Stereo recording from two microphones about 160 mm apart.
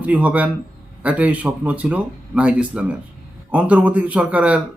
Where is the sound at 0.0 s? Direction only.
10° right (ahead or behind).